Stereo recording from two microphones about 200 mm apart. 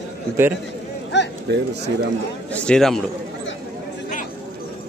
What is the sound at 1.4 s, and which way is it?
Speech, 60° right (ahead or behind).